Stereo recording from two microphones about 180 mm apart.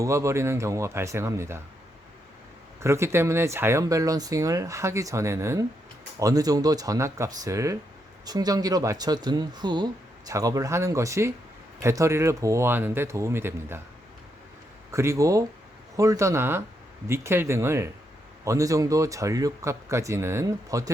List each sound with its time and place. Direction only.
0.0 s speech: 15° right (ahead or behind)
2.8 s speech: 15° right (ahead or behind)
14.9 s speech: 15° right (ahead or behind)